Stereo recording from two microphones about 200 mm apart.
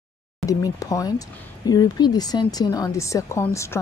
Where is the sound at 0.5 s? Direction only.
15° left (ahead or behind).